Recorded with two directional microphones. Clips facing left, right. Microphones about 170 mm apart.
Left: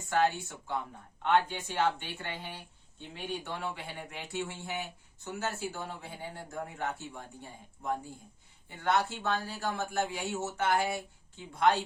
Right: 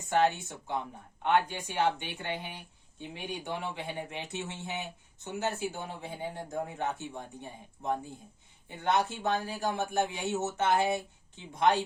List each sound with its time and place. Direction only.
0.1 s speech: 20° right (ahead or behind)
8.7 s speech: 20° right (ahead or behind)